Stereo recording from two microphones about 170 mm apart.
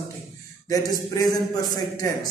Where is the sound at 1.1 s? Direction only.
20° left (ahead or behind).